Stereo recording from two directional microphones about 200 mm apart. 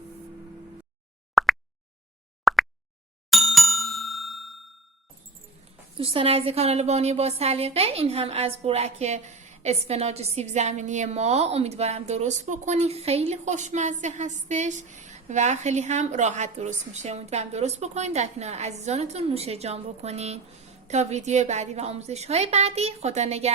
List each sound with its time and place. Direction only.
1.4 s plop: centre (ahead or behind)
3.2 s bicycle bell: centre (ahead or behind)
6.0 s a woman's voice: 30° right (ahead or behind)